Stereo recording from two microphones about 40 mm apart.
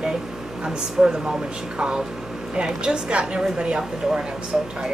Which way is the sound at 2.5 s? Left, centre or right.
Right.